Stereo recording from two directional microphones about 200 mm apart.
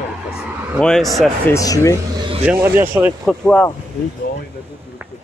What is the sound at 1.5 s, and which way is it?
Speech, 15° left (ahead or behind).